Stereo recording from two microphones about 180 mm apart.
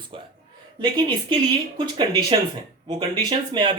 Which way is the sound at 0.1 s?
30° right (ahead or behind).